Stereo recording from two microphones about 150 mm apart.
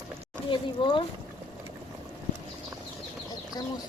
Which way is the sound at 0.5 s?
35° left (ahead or behind).